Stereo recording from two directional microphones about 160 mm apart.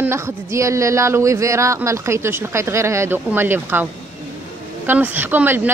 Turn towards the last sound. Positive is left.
turn(degrees=-10)  # may be behind; listen again after turning